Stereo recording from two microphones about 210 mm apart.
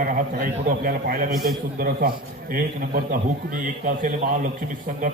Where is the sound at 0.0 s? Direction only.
40° right (ahead or behind).